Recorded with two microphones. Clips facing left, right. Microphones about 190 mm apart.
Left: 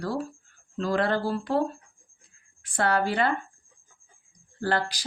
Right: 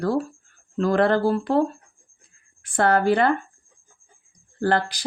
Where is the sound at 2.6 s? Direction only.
55° right (ahead or behind).